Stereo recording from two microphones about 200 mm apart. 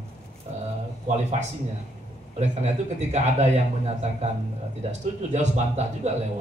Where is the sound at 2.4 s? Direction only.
35° right (ahead or behind).